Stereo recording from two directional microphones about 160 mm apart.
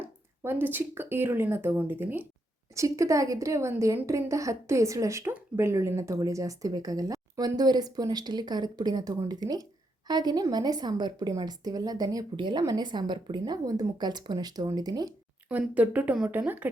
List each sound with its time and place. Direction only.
0.0 s a woman's voice: 10° right (ahead or behind)
15.4 s speech: 10° right (ahead or behind)